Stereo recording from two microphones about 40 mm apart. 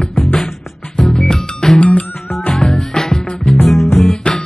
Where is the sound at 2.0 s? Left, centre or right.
Left.